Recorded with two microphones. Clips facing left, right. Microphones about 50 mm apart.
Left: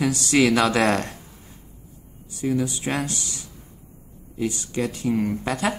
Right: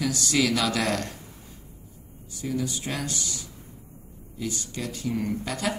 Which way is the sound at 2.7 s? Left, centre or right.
Left.